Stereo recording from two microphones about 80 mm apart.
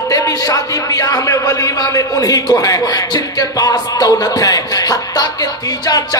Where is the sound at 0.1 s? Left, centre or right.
Left.